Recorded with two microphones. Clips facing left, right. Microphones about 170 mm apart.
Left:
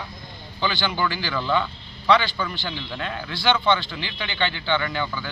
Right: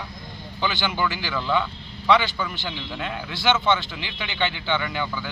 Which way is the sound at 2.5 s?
10° right (ahead or behind).